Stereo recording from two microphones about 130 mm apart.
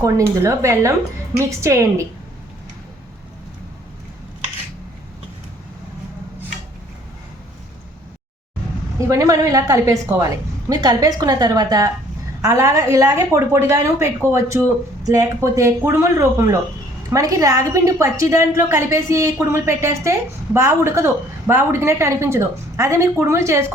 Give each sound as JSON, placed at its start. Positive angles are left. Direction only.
{"t": 0.0, "sound": "a woman's voice", "side_deg": -25}
{"t": 9.0, "sound": "a woman's voice", "side_deg": -25}